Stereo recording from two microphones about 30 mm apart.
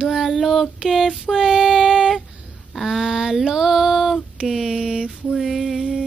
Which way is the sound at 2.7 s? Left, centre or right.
Centre.